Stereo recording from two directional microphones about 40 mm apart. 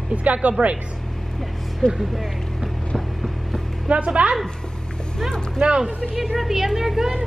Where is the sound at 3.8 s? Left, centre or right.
Right.